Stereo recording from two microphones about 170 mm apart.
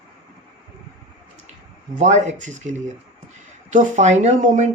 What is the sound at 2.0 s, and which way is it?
Speech, 45° right (ahead or behind).